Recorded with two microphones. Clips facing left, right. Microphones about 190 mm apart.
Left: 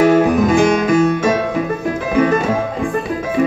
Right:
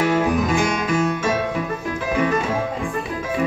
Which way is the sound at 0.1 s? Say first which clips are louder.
Left 7 dB; 50° left (ahead or behind).